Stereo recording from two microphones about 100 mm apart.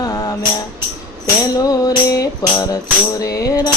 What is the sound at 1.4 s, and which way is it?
Music, 40° left (ahead or behind).